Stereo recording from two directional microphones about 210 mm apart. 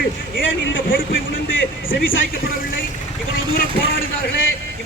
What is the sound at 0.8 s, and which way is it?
Speech, 45° left (ahead or behind).